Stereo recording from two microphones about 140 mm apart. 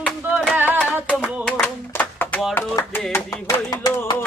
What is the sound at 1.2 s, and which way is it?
Clapping, 10° left (ahead or behind).